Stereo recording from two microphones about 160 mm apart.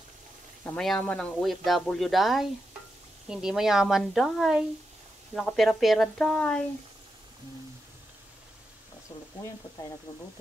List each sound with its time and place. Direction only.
0.7 s speech: 5° left (ahead or behind)
9.4 s speech: 20° left (ahead or behind)